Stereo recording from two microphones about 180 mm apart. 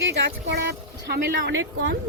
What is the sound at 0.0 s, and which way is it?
Speech, 75° right (ahead or behind).